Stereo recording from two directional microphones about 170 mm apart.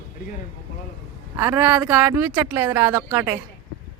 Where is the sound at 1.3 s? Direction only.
15° right (ahead or behind).